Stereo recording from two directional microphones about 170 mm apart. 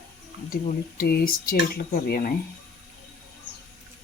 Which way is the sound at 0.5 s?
65° left (ahead or behind).